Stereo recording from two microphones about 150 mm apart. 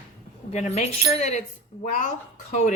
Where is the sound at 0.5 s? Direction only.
50° left (ahead or behind).